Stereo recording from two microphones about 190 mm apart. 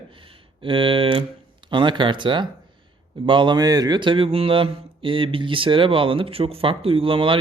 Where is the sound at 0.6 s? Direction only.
25° right (ahead or behind).